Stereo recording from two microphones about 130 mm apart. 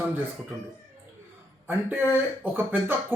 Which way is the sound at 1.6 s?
15° right (ahead or behind).